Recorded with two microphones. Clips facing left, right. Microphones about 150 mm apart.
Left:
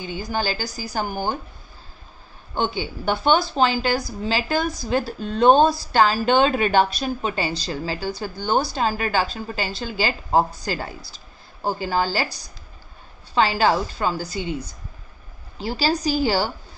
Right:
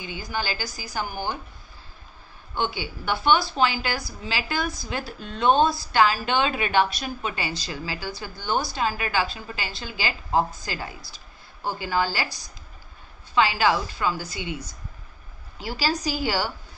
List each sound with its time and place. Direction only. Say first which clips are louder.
0.0 s speech: left 5 dB; 35° left (ahead or behind)
3.1 s speech: left 2 dB; 30° left (ahead or behind)
13.3 s speech: left 2 dB; 35° left (ahead or behind)
15.5 s speech: left 4 dB; 30° left (ahead or behind)